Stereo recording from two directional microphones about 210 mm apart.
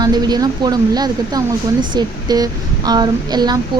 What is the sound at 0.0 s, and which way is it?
Speech, 20° right (ahead or behind).